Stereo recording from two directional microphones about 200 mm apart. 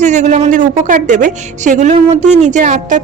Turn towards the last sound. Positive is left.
turn(degrees=-40)  # may be behind; listen again after turning